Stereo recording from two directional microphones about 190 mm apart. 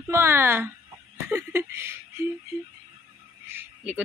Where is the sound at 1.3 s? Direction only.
15° right (ahead or behind).